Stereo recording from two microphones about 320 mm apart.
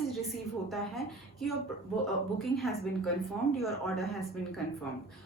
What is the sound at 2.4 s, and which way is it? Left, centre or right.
A woman's voice, centre.